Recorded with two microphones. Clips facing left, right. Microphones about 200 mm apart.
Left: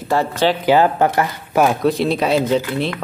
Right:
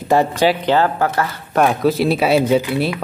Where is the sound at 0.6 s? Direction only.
15° left (ahead or behind).